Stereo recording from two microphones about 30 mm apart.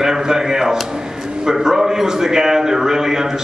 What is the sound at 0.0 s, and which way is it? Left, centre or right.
A man's voice, right.